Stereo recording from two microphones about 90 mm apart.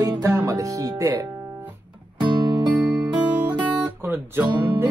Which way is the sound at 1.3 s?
25° right (ahead or behind).